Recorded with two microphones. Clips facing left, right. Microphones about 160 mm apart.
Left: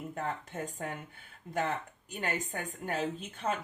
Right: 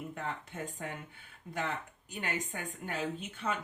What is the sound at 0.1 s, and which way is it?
Speech, 45° left (ahead or behind).